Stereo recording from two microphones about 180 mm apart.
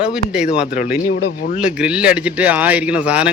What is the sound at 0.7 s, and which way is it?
Speech, 45° left (ahead or behind).